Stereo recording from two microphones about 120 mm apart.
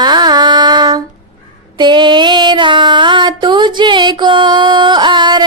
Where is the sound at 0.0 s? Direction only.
35° right (ahead or behind).